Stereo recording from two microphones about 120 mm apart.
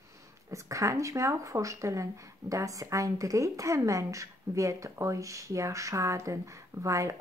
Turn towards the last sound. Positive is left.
turn(degrees=-25)  # may be behind; listen again after turning